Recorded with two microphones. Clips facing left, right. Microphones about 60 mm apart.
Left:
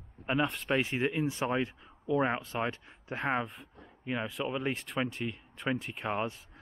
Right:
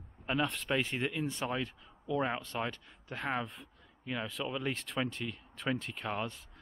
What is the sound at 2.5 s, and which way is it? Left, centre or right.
Speech, left.